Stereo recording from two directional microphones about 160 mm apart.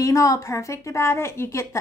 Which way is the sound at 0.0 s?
20° left (ahead or behind).